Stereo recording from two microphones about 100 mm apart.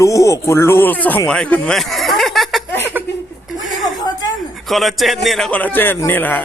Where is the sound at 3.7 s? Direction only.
Centre (ahead or behind).